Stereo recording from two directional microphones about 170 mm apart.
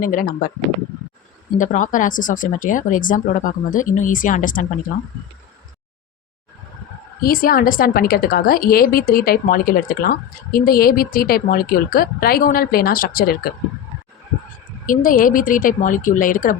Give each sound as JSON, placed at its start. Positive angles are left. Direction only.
{"t": 0.0, "sound": "a woman's voice", "side_deg": 55}
{"t": 1.5, "sound": "speech", "side_deg": 50}
{"t": 7.2, "sound": "a woman's voice", "side_deg": 55}
{"t": 14.8, "sound": "speech", "side_deg": 55}